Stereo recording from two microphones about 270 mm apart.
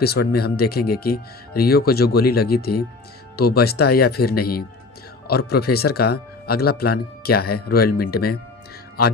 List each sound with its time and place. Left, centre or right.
0.0 s speech: left